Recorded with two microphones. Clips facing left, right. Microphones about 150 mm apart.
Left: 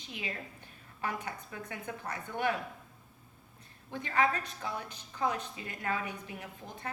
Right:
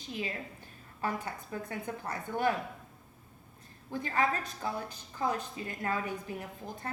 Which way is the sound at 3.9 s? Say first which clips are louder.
Left 1 dB; 35° right (ahead or behind).